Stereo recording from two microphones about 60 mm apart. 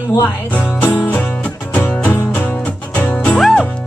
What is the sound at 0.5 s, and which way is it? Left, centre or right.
Music, left.